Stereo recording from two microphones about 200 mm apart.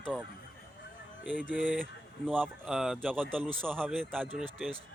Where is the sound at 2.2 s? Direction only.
10° right (ahead or behind).